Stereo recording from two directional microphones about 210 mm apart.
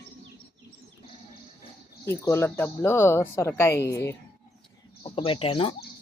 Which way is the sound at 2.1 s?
10° left (ahead or behind).